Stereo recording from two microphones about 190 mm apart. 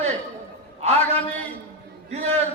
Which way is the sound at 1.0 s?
10° left (ahead or behind).